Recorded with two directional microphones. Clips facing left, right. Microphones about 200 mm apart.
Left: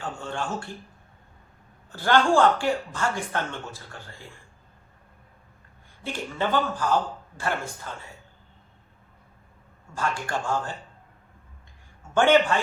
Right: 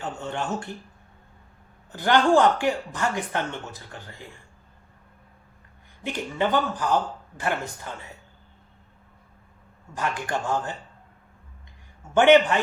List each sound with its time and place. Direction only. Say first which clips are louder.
0.0 s speech: right 1 dB; 20° right (ahead or behind)
1.9 s speech: right 2 dB; 15° right (ahead or behind)
6.0 s speech: right 3 dB; 15° right (ahead or behind)
9.9 s speech: right 1 dB; 20° right (ahead or behind)
12.1 s speech: right 3 dB; 20° right (ahead or behind)